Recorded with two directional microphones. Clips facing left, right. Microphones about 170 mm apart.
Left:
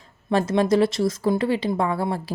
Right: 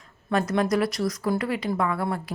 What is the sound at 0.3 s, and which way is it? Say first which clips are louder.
A woman's voice: left 4 dB; 30° left (ahead or behind).